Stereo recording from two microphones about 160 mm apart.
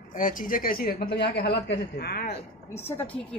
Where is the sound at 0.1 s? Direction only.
55° left (ahead or behind); by 2.3 s 80° left.